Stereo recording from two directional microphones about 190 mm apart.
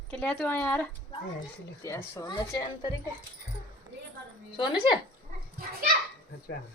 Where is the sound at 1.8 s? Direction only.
15° left (ahead or behind).